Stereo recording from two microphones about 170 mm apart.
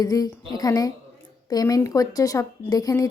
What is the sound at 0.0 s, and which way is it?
A woman's voice, 20° left (ahead or behind).